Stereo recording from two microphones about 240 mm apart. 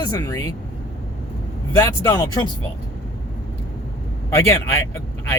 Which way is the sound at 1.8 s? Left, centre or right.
Centre.